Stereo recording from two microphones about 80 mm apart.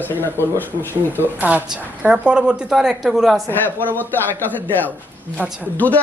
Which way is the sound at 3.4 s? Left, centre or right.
Left.